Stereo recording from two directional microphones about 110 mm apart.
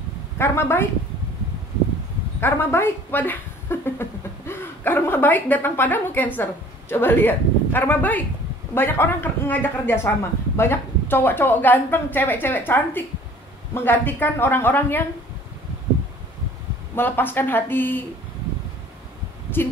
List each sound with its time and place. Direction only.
0.4 s speech: 20° left (ahead or behind)
2.4 s speech: 20° left (ahead or behind)
16.9 s speech: 20° left (ahead or behind)
19.6 s speech: 20° left (ahead or behind)